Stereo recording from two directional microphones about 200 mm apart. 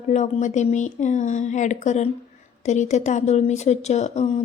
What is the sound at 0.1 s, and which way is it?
Speech, 35° left (ahead or behind).